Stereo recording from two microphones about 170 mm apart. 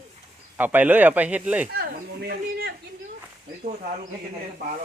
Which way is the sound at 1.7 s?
60° right (ahead or behind).